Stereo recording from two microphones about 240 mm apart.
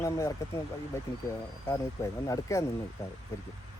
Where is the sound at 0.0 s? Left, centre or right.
Centre.